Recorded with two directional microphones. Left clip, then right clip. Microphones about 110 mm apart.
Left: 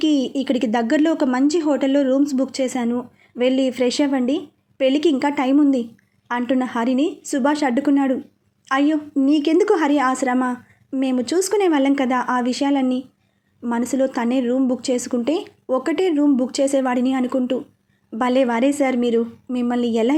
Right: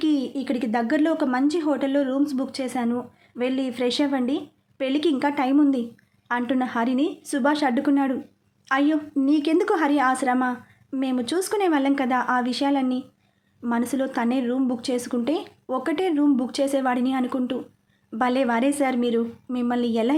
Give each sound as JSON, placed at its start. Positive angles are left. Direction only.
{"t": 0.0, "sound": "a woman's voice", "side_deg": 30}